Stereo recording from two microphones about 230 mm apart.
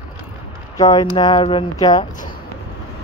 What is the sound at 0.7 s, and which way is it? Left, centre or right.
Speech, centre.